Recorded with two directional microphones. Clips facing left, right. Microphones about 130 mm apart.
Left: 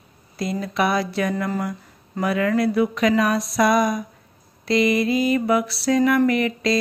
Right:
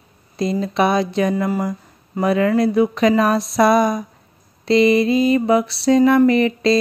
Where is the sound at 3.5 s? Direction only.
30° right (ahead or behind).